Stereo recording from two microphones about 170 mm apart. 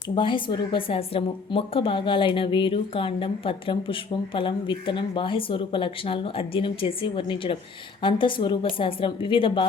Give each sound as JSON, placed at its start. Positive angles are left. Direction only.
{"t": 0.1, "sound": "a woman's voice", "side_deg": 30}